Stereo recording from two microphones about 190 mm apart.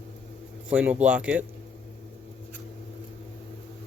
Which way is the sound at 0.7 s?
5° right (ahead or behind).